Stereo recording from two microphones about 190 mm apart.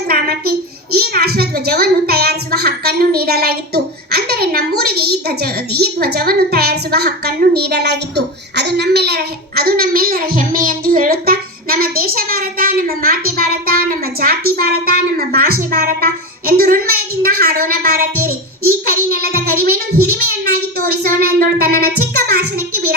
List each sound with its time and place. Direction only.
0.1 s a child's voice: 55° right (ahead or behind)